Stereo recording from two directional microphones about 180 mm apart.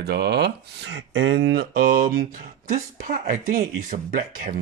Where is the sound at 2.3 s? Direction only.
50° right (ahead or behind).